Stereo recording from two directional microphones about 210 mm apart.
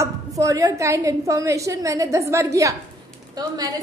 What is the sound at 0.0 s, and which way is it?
A woman's voice, 15° right (ahead or behind).